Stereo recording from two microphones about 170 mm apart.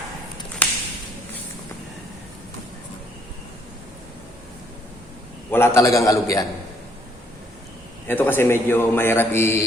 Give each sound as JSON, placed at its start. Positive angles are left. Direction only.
{"t": 0.6, "sound": "a sound", "side_deg": 10}
{"t": 5.5, "sound": "a man's voice", "side_deg": 15}
{"t": 8.0, "sound": "a man's voice", "side_deg": 10}